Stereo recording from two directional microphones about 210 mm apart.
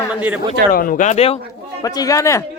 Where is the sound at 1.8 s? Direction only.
20° left (ahead or behind).